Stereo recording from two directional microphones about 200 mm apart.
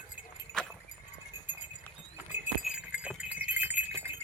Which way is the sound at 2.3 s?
5° right (ahead or behind).